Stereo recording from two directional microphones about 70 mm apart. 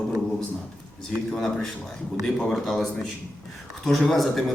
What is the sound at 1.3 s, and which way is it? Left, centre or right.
A man's voice, centre.